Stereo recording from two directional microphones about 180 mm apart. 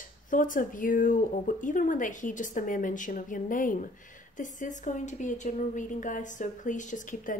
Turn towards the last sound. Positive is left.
turn(degrees=45)  # may be behind; listen again after turning